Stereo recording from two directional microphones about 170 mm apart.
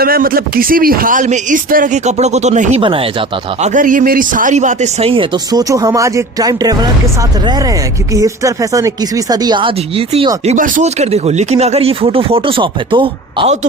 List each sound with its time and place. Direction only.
0.0 s speech: 60° right (ahead or behind); by 2.8 s 40° right (ahead or behind)
2.8 s speech: 30° right (ahead or behind)
3.7 s speech: 50° right (ahead or behind); by 6.9 s 20° right (ahead or behind)
8.1 s speech: 20° right (ahead or behind)